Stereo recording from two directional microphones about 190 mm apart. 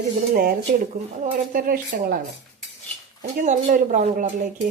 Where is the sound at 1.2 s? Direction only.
45° right (ahead or behind).